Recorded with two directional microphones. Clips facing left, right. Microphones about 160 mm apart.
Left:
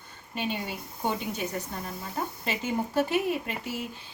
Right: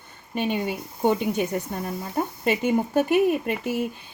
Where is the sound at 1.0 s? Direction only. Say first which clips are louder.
Right 8 dB; 55° right (ahead or behind).